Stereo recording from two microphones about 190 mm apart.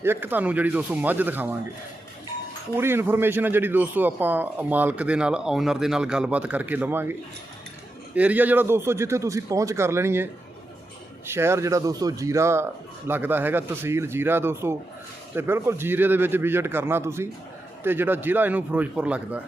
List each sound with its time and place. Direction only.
0.0 s a man's voice: 10° right (ahead or behind)
2.7 s a man's voice: 10° right (ahead or behind)
11.3 s a man's voice: 15° right (ahead or behind)